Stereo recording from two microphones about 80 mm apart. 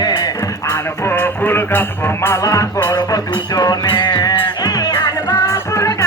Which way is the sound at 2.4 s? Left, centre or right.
Left.